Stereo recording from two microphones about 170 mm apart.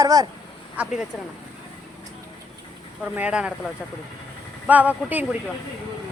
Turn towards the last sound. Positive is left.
turn(degrees=-10)  # may be behind; listen again after turning